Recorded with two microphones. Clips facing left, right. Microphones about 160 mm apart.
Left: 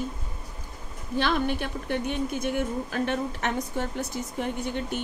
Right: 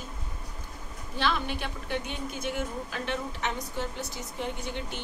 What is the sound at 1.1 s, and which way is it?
Speech, 50° left (ahead or behind).